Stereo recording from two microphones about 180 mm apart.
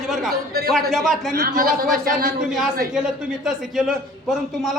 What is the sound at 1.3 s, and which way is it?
A man's voice, 50° right (ahead or behind).